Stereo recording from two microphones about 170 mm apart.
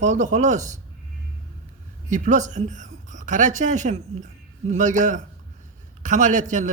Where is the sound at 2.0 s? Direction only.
45° right (ahead or behind).